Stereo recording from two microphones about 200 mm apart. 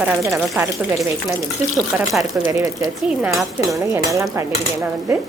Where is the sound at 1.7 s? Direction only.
Centre (ahead or behind).